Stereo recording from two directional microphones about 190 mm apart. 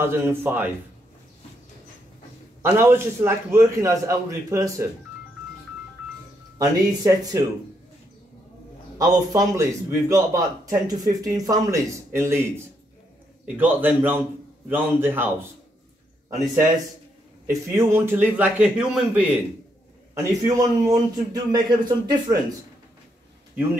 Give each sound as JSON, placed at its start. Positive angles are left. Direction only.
{"t": 0.0, "sound": "a man's voice", "side_deg": -10}
{"t": 2.6, "sound": "a man's voice", "side_deg": -10}
{"t": 6.6, "sound": "a man's voice", "side_deg": -20}
{"t": 8.9, "sound": "a man's voice", "side_deg": -20}
{"t": 17.5, "sound": "a man's voice", "side_deg": -15}
{"t": 20.2, "sound": "a man's voice", "side_deg": -15}